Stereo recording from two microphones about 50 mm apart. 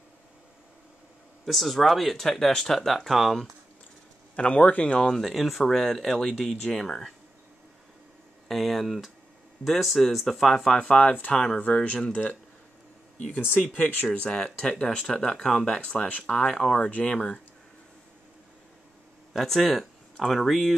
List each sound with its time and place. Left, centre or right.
1.4 s speech: centre
4.4 s speech: left
4.9 s speech: centre
5.2 s speech: centre
8.5 s speech: centre
10.8 s speech: left
13.4 s speech: left
14.2 s speech: centre
19.3 s speech: centre